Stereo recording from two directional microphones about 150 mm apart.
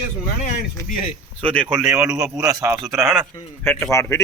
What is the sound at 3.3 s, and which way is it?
Speech, 15° left (ahead or behind).